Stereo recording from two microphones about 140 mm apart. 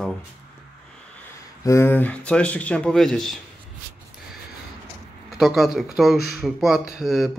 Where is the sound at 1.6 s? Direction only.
20° left (ahead or behind); by 3.3 s 5° left (ahead or behind).